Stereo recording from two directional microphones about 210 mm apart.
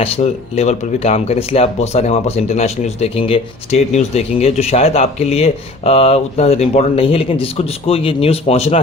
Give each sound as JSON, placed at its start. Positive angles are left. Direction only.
{"t": 0.0, "sound": "speech", "side_deg": 30}